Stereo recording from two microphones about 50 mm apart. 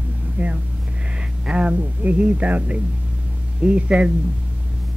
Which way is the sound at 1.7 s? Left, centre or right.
Right.